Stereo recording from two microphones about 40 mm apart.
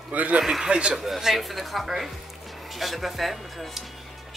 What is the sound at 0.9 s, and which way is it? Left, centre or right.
Speech, centre.